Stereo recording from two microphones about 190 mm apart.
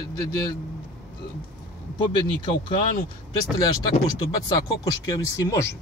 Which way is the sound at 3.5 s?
20° left (ahead or behind).